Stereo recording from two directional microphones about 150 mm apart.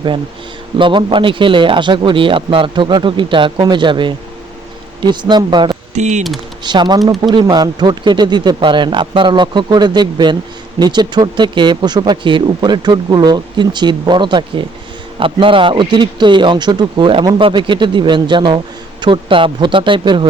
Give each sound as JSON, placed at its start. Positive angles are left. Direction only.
{"t": 0.8, "sound": "a man's voice", "side_deg": -35}
{"t": 5.9, "sound": "speech", "side_deg": -50}
{"t": 6.6, "sound": "a man's voice", "side_deg": -30}